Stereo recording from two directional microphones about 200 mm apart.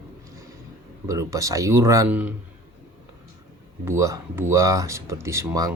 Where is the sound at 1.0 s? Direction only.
15° right (ahead or behind).